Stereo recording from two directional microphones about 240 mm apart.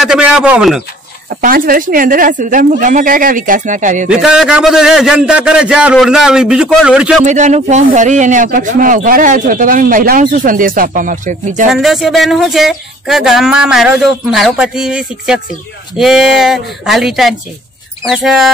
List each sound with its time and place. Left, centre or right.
0.0 s speech: centre
1.3 s speech: right
4.1 s speech: centre
7.2 s speech: right
11.7 s speech: centre